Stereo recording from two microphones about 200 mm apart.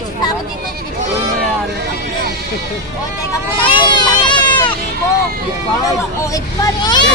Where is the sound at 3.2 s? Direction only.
20° left (ahead or behind).